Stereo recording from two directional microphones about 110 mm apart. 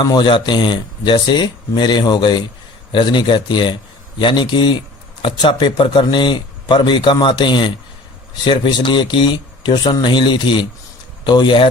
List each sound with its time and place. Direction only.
0.0 s speech: 45° left (ahead or behind)